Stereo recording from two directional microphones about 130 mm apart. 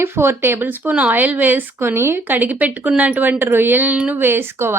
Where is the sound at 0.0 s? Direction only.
20° right (ahead or behind).